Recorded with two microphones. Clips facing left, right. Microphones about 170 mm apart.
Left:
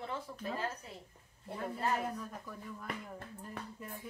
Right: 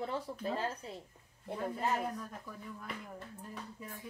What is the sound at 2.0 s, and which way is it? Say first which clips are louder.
Speech: even; centre (ahead or behind).